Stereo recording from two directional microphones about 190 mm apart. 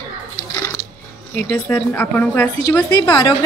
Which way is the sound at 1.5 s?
10° left (ahead or behind).